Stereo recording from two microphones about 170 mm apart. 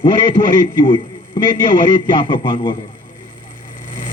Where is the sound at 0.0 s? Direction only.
30° left (ahead or behind).